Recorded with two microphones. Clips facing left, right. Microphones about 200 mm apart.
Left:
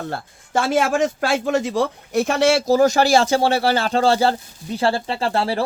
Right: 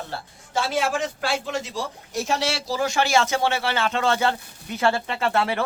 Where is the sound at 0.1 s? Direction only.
50° left (ahead or behind).